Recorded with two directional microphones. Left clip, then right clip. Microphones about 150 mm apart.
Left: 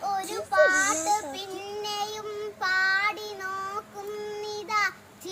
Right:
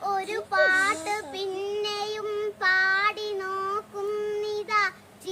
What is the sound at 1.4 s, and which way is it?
Child singing, 5° right (ahead or behind).